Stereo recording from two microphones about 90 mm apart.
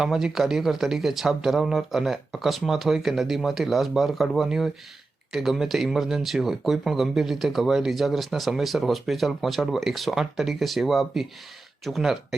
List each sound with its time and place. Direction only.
0.0 s speech: 5° right (ahead or behind)